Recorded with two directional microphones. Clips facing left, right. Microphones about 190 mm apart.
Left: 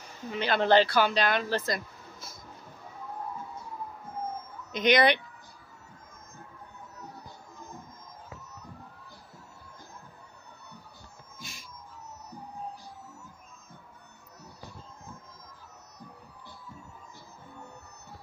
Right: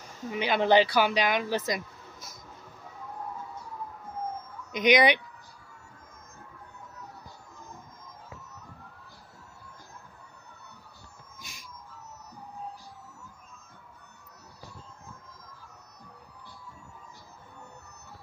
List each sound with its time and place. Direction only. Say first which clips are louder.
0.3 s speech: even; 10° right (ahead or behind)
4.7 s speech: right 1 dB; 15° right (ahead or behind)
11.3 s music: left 4 dB; 15° right (ahead or behind)